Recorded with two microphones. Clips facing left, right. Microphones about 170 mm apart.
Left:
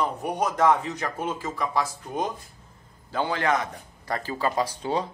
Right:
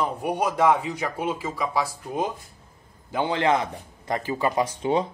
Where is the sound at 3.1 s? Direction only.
20° right (ahead or behind).